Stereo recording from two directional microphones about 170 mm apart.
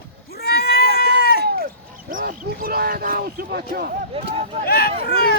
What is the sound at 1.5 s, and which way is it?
Speech, 60° right (ahead or behind).